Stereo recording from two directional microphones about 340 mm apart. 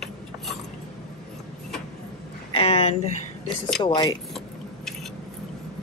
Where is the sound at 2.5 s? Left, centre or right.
Centre.